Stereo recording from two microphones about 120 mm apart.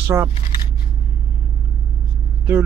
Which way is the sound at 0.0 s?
20° right (ahead or behind).